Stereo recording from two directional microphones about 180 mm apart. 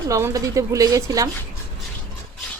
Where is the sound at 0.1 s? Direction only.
15° right (ahead or behind).